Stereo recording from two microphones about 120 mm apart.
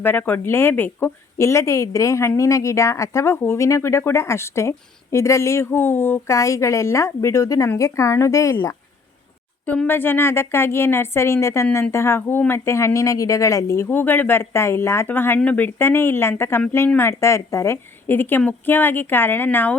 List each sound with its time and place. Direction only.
0.0 s speech: 15° left (ahead or behind)
9.6 s speech: 15° left (ahead or behind)
13.8 s a woman's voice: 15° left (ahead or behind)